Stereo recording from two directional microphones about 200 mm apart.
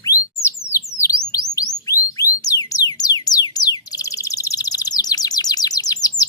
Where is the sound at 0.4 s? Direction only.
15° left (ahead or behind).